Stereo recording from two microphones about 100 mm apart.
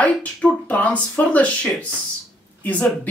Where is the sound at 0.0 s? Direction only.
15° left (ahead or behind).